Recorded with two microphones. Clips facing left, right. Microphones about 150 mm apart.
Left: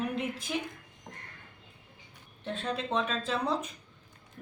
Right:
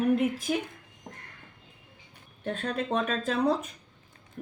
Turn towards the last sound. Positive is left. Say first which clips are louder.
# right 3 dB
turn(degrees=-50)  # may be behind; listen again after turning